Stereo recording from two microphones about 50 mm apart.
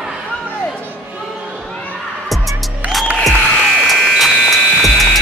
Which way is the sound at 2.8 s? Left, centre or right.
Right.